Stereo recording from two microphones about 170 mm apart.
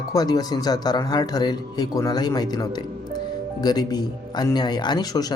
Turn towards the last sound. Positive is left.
turn(degrees=20)  # may be behind; listen again after turning